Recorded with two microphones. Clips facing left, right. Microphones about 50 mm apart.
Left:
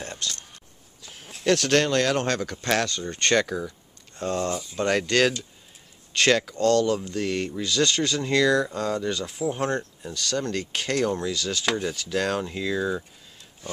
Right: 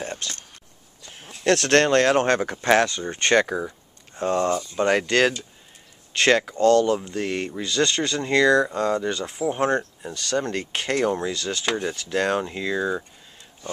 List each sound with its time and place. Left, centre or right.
0.0 s a sound: centre
1.3 s a sound: centre
1.7 s speech: right
2.0 s speech: right; by 3.4 s centre
3.4 s speech: right
4.1 s speech: centre